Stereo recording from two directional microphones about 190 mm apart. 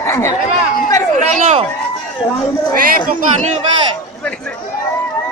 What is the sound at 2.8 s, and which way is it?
Speech, 45° right (ahead or behind).